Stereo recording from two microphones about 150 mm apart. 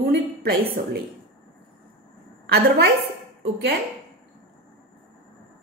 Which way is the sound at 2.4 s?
90° right.